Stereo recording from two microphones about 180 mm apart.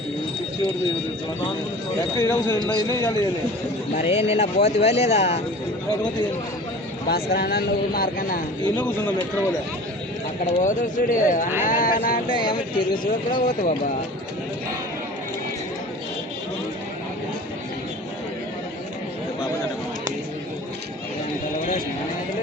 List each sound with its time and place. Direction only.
2.1 s speech: 15° left (ahead or behind)
3.9 s speech: 35° left (ahead or behind)
7.1 s speech: 60° left (ahead or behind)
8.8 s speech: 10° left (ahead or behind)
10.6 s speech: 45° left (ahead or behind)
11.6 s a sound: 45° left (ahead or behind)
12.3 s speech: 25° left (ahead or behind)